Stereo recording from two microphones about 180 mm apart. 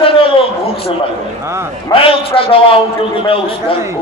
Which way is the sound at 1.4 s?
15° right (ahead or behind).